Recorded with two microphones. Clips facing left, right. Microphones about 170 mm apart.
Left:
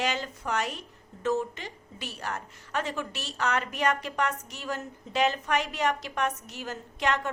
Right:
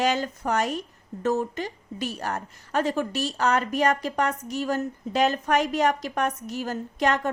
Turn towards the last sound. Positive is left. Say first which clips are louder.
# right 5 dB
turn(degrees=-40)  # may be behind; listen again after turning